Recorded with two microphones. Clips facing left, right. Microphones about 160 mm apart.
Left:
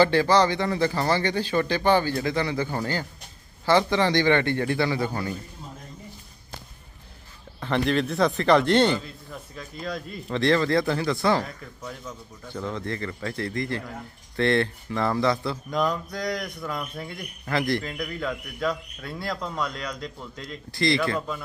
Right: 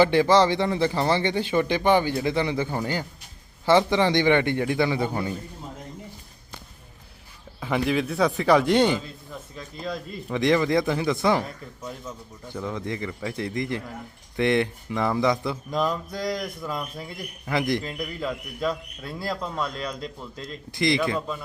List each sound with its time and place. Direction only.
0.0 s speech: 20° right (ahead or behind)
7.6 s a man's voice: 5° right (ahead or behind)
9.3 s speech: centre (ahead or behind)
10.3 s a man's voice: 15° right (ahead or behind)
12.5 s a man's voice: 15° right (ahead or behind)
15.7 s speech: centre (ahead or behind)
17.5 s speech: 20° right (ahead or behind)
17.8 s speech: 5° right (ahead or behind)
19.6 s speech: 30° right (ahead or behind)